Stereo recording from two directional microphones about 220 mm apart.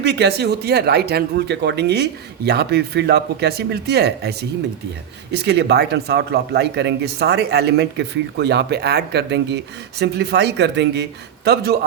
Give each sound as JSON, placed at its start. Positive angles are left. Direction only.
{"t": 0.0, "sound": "speech", "side_deg": -50}